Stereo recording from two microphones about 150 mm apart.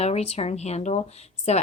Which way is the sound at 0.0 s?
45° left (ahead or behind).